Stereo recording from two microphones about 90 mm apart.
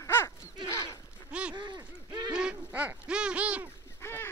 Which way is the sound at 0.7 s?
35° left (ahead or behind).